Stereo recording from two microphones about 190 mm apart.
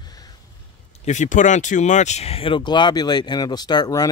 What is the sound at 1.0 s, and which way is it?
Speech, 40° left (ahead or behind).